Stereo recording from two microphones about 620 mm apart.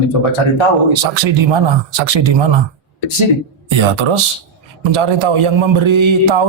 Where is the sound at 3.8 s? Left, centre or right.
Right.